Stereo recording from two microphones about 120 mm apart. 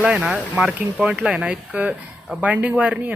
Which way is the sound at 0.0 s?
10° right (ahead or behind).